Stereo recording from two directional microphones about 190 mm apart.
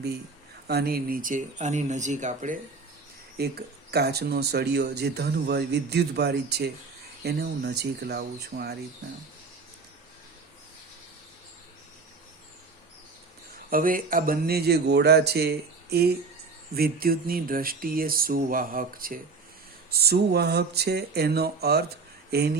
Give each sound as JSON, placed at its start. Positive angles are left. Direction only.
{"t": 0.7, "sound": "speech", "side_deg": -55}
{"t": 3.3, "sound": "speech", "side_deg": -55}
{"t": 13.7, "sound": "speech", "side_deg": -45}